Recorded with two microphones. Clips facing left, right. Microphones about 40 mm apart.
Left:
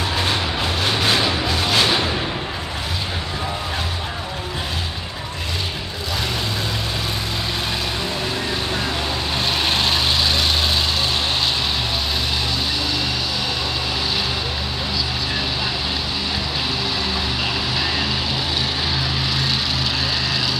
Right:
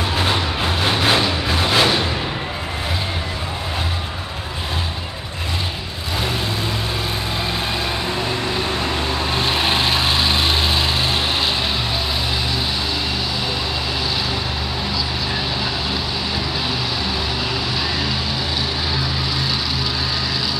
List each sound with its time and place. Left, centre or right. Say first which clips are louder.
0.2 s a sound: right 2 dB; centre
1.5 s music: right 4 dB; centre
9.5 s vehicle: right 1 dB; centre